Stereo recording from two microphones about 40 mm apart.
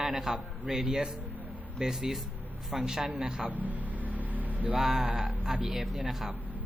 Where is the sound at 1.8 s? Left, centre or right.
Centre.